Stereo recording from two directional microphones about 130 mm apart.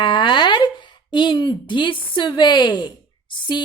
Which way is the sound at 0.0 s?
35° left (ahead or behind).